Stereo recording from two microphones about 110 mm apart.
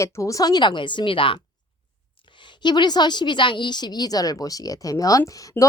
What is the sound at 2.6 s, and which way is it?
A woman's voice, 40° left (ahead or behind).